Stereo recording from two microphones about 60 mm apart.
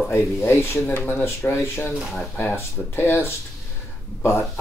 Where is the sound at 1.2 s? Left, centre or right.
Left.